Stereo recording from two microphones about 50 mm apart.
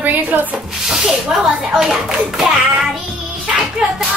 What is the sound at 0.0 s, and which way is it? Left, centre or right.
Speech, right.